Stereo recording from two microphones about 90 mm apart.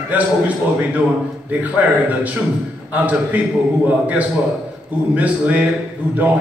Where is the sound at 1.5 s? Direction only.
20° right (ahead or behind).